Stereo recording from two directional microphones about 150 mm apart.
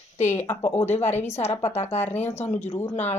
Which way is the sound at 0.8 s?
45° left (ahead or behind).